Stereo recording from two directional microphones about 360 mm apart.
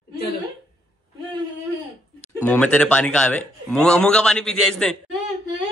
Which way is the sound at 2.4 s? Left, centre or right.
Centre.